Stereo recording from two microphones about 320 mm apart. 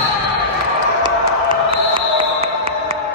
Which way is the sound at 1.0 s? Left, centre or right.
Centre.